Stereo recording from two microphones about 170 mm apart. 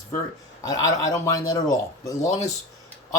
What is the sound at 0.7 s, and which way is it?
A man's voice, 20° left (ahead or behind).